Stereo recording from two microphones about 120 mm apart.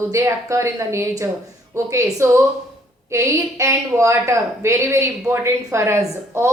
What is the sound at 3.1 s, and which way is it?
A woman's voice, 25° right (ahead or behind).